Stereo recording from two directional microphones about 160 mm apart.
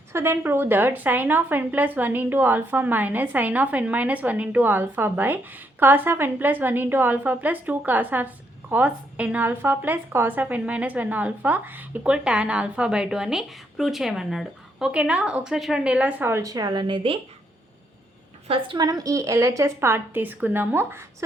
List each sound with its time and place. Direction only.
0.1 s a woman's voice: 15° right (ahead or behind); by 17.2 s 30° right (ahead or behind)
18.4 s a woman's voice: 35° right (ahead or behind); by 21.0 s 15° right (ahead or behind)